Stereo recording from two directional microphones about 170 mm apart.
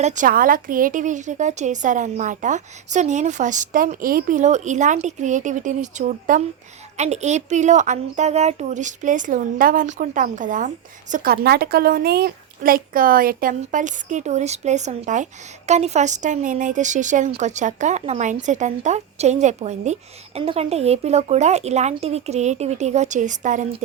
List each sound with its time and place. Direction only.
0.0 s a woman's voice: 50° right (ahead or behind)
6.9 s a woman's voice: 40° right (ahead or behind)